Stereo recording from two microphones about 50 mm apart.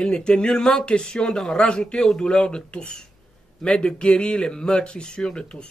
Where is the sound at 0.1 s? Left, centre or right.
Centre.